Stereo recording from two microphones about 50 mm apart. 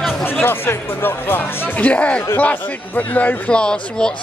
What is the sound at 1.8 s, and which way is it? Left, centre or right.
Speech, left.